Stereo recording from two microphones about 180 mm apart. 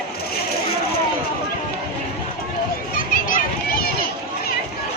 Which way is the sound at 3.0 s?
50° left (ahead or behind).